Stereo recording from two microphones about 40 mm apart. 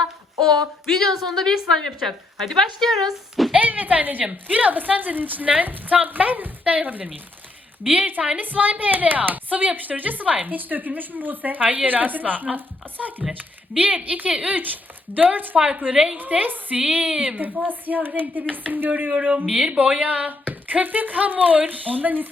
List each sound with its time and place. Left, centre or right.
0.9 s speech: centre
3.5 s a woman's voice: right
16.3 s a woman's voice: right
19.1 s a woman's voice: right